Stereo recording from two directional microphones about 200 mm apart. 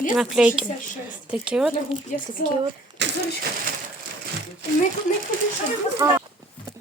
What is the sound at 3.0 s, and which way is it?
Vehicle, 60° right (ahead or behind).